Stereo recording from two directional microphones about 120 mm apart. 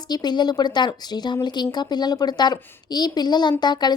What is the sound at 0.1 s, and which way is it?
A woman's voice, 35° left (ahead or behind).